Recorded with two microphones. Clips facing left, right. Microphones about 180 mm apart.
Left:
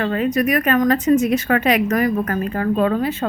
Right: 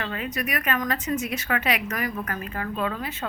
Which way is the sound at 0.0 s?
45° left (ahead or behind).